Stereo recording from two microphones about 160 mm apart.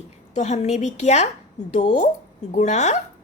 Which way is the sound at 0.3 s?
45° left (ahead or behind).